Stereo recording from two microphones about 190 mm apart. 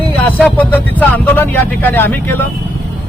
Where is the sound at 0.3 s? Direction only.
10° left (ahead or behind).